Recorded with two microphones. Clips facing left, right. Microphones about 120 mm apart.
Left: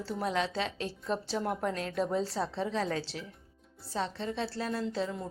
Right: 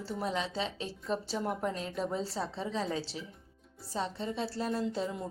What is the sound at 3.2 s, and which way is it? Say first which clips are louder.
A woman's voice: left 1 dB; 15° right (ahead or behind).